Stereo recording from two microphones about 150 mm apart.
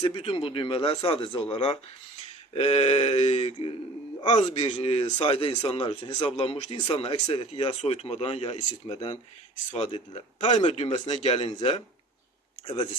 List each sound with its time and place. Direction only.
0.1 s speech: 40° left (ahead or behind)
11.1 s speech: 40° left (ahead or behind)